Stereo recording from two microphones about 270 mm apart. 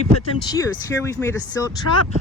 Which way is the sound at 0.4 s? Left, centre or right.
Centre.